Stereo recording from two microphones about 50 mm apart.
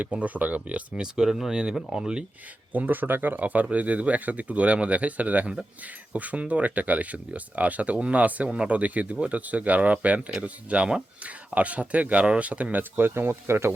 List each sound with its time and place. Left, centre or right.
0.0 s speech: right
0.9 s speech: centre
2.7 s speech: right
13.0 s speech: right